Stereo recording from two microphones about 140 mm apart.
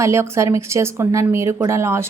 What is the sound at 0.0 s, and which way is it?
Speech, 20° right (ahead or behind).